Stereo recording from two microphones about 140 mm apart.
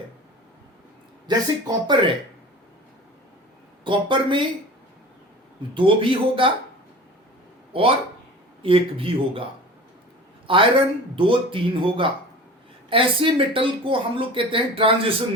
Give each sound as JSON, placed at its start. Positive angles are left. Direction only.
{"t": 1.3, "sound": "speech", "side_deg": -30}
{"t": 3.8, "sound": "speech", "side_deg": -35}
{"t": 5.7, "sound": "speech", "side_deg": -40}
{"t": 7.7, "sound": "speech", "side_deg": -40}
{"t": 10.4, "sound": "speech", "side_deg": -40}